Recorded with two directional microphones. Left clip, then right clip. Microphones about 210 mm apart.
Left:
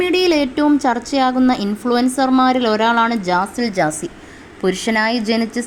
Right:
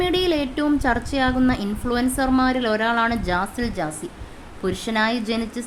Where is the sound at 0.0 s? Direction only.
10° left (ahead or behind).